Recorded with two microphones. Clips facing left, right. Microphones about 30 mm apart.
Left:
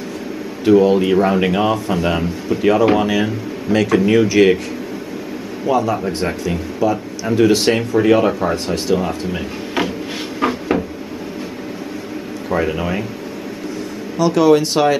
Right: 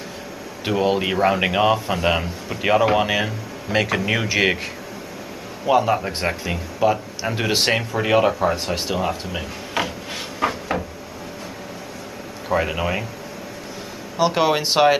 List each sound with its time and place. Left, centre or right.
0.7 s speech: centre
5.7 s speech: right; by 8.7 s centre
8.7 s speech: centre
9.8 s a sound: centre
12.4 s speech: centre
14.1 s speech: right